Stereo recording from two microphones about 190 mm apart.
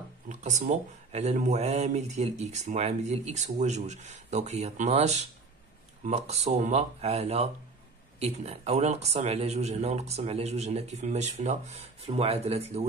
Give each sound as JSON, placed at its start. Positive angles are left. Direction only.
{"t": 0.3, "sound": "speech", "side_deg": -40}